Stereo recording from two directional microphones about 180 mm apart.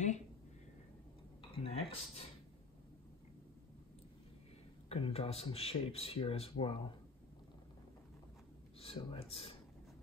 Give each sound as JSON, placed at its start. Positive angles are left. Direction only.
{"t": 1.4, "sound": "speech", "side_deg": 30}
{"t": 4.8, "sound": "speech", "side_deg": 35}
{"t": 8.7, "sound": "speech", "side_deg": 30}